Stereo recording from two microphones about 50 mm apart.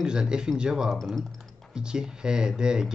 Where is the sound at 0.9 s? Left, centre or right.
Centre.